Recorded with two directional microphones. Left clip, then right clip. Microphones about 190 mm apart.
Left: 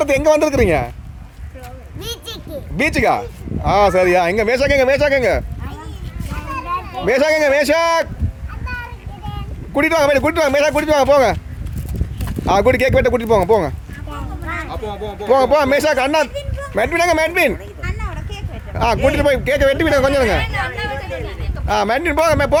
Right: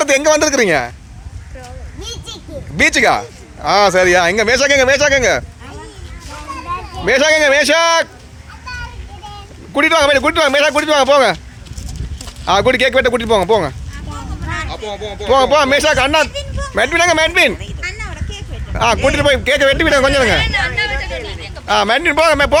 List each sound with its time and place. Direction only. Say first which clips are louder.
0.0 s a man's voice: right 2 dB; 5° left (ahead or behind)
2.0 s speech: left 1 dB; 5° left (ahead or behind)
6.9 s a man's voice: right 3 dB; 5° left (ahead or behind)
9.7 s a man's voice: right 3 dB; 5° left (ahead or behind)
12.5 s a man's voice: right 2 dB; 10° left (ahead or behind)
14.6 s speech: right 2 dB; 60° left (ahead or behind)
15.3 s a man's voice: right 2 dB; 5° left (ahead or behind)
17.8 s a sound: right 5 dB; 65° left (ahead or behind)
18.7 s a man's voice: right 2 dB; centre (ahead or behind)
20.7 s a sound: right 6 dB; 60° left (ahead or behind)
21.7 s a man's voice: right 4 dB; centre (ahead or behind)